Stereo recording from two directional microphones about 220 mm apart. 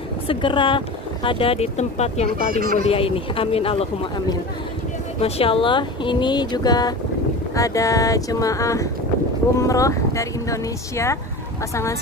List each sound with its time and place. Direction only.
0.3 s speech: 20° left (ahead or behind)
2.5 s speech: 40° right (ahead or behind)
2.8 s speech: 25° left (ahead or behind)